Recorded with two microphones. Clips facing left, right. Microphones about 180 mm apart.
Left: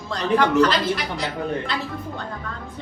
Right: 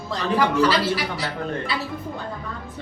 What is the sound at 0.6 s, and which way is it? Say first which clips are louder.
Speech: left 1 dB; 10° right (ahead or behind).